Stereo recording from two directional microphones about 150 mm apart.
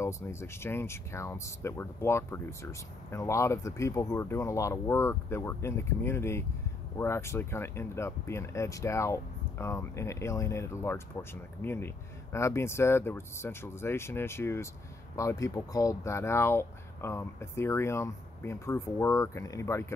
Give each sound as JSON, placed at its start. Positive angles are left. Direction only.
{"t": 0.0, "sound": "speech", "side_deg": 20}